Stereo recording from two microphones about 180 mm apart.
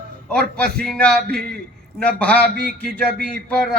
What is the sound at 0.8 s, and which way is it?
Music, 5° left (ahead or behind).